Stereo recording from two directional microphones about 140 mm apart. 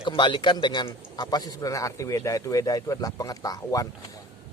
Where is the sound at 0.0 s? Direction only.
35° left (ahead or behind).